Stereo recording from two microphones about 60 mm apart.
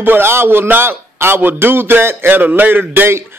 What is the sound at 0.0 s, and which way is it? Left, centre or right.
A man's voice, right.